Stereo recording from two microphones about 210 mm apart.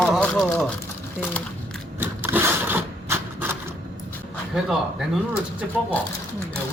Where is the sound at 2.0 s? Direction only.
10° right (ahead or behind).